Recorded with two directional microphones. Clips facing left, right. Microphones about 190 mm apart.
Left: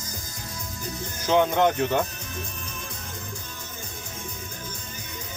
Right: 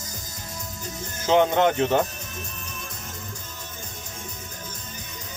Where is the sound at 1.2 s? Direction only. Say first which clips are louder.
Right 2 dB; 25° right (ahead or behind).